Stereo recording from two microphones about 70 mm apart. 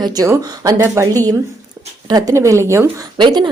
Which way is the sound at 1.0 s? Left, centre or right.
Right.